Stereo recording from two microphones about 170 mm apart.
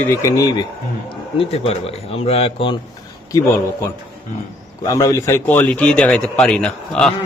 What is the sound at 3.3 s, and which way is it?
Speech, 20° left (ahead or behind).